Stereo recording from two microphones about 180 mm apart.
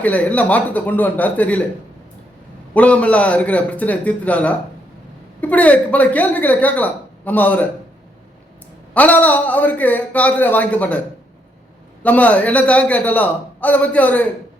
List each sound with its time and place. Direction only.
0.0 s speech: 10° left (ahead or behind)
2.7 s speech: 5° left (ahead or behind)
8.9 s speech: 10° left (ahead or behind)
12.0 s speech: 10° left (ahead or behind)